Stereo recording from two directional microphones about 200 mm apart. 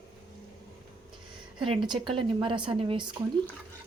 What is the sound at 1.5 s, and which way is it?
A woman's voice, 25° right (ahead or behind).